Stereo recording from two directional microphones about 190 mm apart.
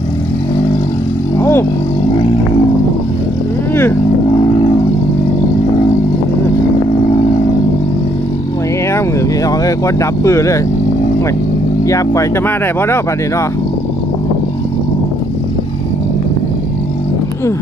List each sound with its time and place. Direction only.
1.4 s vehicle: 15° left (ahead or behind)
4.3 s vehicle: 25° left (ahead or behind)
8.9 s vehicle: 15° left (ahead or behind)
11.9 s speech: 15° left (ahead or behind)